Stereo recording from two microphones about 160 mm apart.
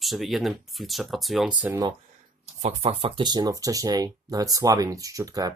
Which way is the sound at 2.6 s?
40° right (ahead or behind).